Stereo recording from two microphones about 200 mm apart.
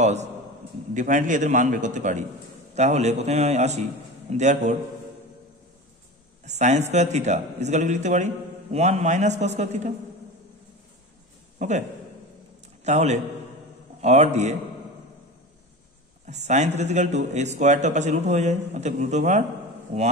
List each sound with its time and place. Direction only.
0.0 s a man's voice: 35° right (ahead or behind)
6.4 s a man's voice: 35° right (ahead or behind)
11.5 s a sound: 35° right (ahead or behind)
12.8 s a man's voice: 35° right (ahead or behind)
16.3 s a man's voice: 35° right (ahead or behind)